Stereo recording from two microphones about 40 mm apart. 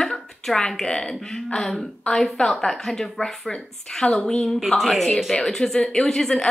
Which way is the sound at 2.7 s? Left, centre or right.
Centre.